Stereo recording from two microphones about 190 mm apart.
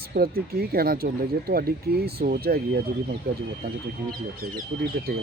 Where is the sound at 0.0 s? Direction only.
55° right (ahead or behind).